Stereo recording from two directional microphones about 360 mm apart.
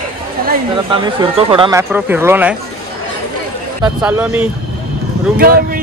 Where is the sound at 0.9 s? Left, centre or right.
Centre.